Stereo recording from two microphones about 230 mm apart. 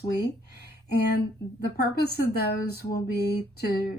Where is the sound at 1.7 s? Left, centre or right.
Left.